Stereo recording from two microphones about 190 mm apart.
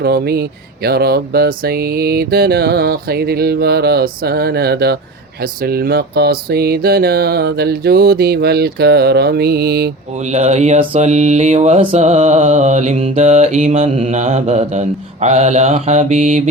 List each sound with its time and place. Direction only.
0.0 s music: 55° right (ahead or behind)
10.2 s mantra: 35° right (ahead or behind)